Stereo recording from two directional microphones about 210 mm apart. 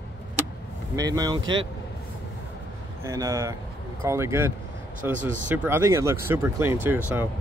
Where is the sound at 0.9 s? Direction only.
15° right (ahead or behind).